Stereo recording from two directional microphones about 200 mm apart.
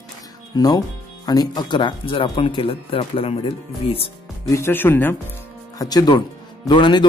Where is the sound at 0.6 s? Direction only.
20° left (ahead or behind).